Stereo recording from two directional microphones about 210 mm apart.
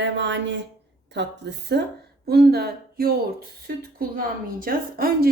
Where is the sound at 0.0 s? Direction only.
60° right (ahead or behind).